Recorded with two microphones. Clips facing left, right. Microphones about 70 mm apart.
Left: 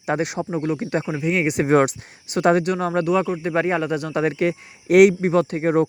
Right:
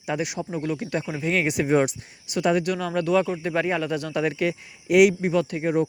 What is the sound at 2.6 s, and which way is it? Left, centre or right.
Speech, left.